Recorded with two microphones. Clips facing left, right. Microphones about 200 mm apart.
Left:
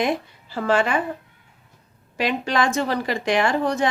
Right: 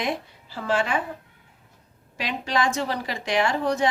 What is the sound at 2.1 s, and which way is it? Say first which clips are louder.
A woman's voice: left 4 dB; 55° left (ahead or behind).